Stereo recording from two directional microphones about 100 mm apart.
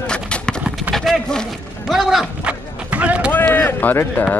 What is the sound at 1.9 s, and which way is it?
Run, 5° right (ahead or behind).